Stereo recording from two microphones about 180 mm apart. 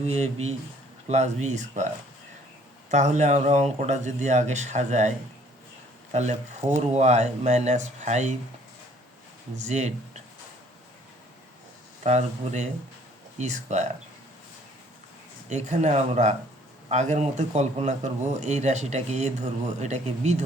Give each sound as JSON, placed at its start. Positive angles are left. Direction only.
{"t": 0.0, "sound": "a man's voice", "side_deg": -35}
{"t": 2.9, "sound": "a man's voice", "side_deg": -40}
{"t": 9.6, "sound": "a man's voice", "side_deg": -40}
{"t": 12.0, "sound": "a man's voice", "side_deg": -40}
{"t": 15.4, "sound": "a man's voice", "side_deg": -40}